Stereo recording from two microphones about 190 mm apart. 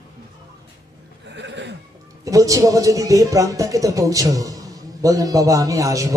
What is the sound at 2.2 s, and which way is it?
Speech, 15° right (ahead or behind).